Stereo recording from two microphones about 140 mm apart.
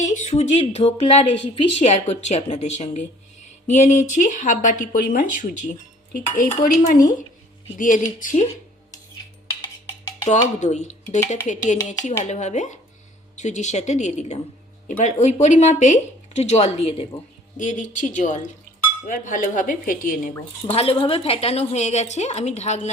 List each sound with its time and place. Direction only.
0.0 s a woman's voice: 60° left (ahead or behind)
10.6 s speech: 55° left (ahead or behind)
14.8 s speech: 65° left (ahead or behind); by 17.1 s 45° left (ahead or behind)
17.6 s speech: 60° left (ahead or behind)
20.7 s a woman's voice: 45° left (ahead or behind)